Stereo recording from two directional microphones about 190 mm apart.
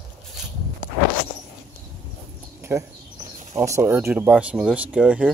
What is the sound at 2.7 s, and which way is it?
Speech, 15° right (ahead or behind).